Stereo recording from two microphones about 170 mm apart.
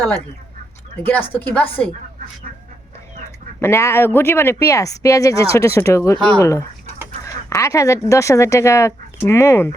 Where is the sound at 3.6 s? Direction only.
15° left (ahead or behind).